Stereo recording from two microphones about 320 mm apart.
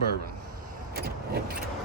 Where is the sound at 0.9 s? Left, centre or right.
Right.